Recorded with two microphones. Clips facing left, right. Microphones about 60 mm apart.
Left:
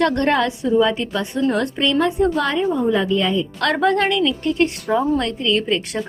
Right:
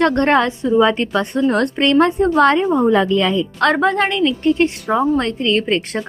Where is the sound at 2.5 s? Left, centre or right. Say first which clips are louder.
Right 4 dB; right.